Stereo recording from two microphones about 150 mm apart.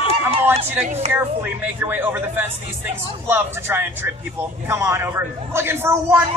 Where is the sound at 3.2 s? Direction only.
15° right (ahead or behind).